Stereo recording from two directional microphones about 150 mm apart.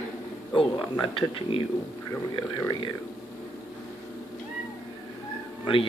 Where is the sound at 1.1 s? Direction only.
35° left (ahead or behind).